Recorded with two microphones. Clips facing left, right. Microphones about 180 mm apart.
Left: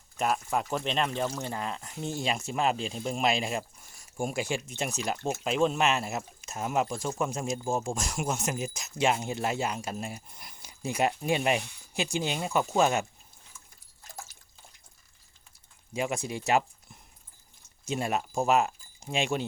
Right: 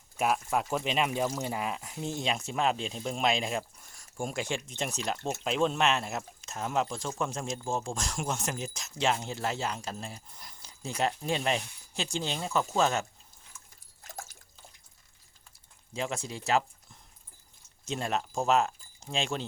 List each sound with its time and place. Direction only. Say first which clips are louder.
0.2 s speech: even; 5° right (ahead or behind); by 13.1 s 10° left (ahead or behind)
15.9 s speech: left 3 dB; 10° left (ahead or behind)